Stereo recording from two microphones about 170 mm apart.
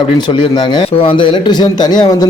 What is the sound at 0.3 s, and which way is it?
A man's voice, 25° left (ahead or behind).